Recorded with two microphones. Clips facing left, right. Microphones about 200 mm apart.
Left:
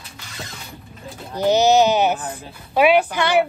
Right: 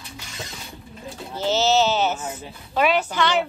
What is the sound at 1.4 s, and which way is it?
Speech, 15° left (ahead or behind).